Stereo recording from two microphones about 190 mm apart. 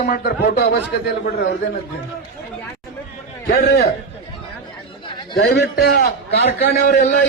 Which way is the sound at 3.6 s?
55° left (ahead or behind).